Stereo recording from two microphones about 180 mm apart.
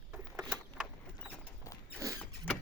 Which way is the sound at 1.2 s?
10° left (ahead or behind).